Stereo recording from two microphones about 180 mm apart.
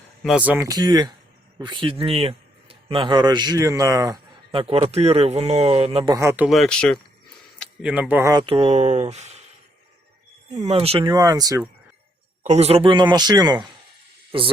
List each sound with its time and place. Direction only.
0.2 s speech: 5° right (ahead or behind)
4.5 s speech: 30° right (ahead or behind)
6.1 s speech: 10° right (ahead or behind); by 7.0 s 5° left (ahead or behind)
7.8 s speech: 5° right (ahead or behind)
8.4 s speech: 30° right (ahead or behind)
10.6 s speech: 35° right (ahead or behind)
11.0 s speech: 20° right (ahead or behind)
12.4 s speech: 40° right (ahead or behind); by 13.7 s 20° right (ahead or behind)